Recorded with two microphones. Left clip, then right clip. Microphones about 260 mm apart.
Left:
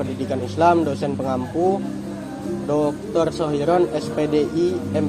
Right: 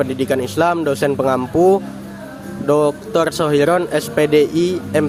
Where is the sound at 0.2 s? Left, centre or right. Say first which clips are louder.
Even; right.